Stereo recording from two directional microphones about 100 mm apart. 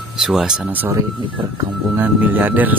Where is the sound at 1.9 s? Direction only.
20° right (ahead or behind).